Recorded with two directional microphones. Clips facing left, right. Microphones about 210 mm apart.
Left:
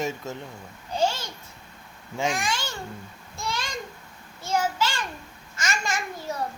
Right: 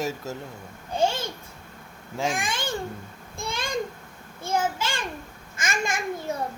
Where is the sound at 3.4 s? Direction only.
55° right (ahead or behind).